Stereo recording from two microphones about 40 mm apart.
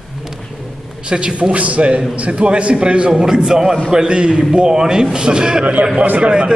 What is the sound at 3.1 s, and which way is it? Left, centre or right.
A man's voice, centre.